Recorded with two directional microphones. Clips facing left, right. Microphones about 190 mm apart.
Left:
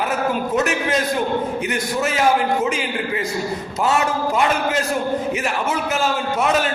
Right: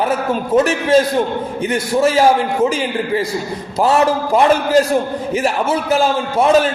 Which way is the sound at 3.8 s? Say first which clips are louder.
Right 6 dB; 35° right (ahead or behind).